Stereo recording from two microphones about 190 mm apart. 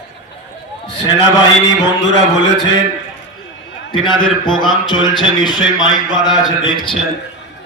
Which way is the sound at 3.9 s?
25° left (ahead or behind).